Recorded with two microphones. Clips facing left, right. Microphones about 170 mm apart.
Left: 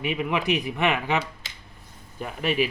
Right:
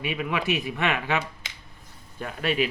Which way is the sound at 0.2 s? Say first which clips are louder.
Left 1 dB; 15° left (ahead or behind).